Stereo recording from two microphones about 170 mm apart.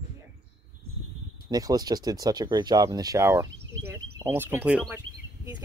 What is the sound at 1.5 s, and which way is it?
Speech, 20° right (ahead or behind).